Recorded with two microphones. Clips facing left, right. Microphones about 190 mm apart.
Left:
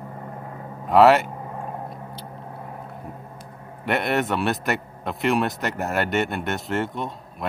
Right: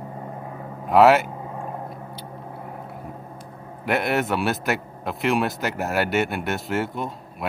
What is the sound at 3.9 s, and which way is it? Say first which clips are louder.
A man's voice: even; centre (ahead or behind).